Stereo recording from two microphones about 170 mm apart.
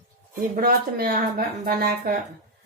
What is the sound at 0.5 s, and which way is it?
Speech, 60° right (ahead or behind).